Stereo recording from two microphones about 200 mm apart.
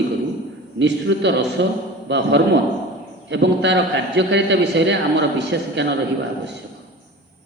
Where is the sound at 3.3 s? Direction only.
60° right (ahead or behind).